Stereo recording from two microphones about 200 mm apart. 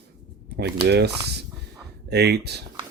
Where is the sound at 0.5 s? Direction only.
55° right (ahead or behind).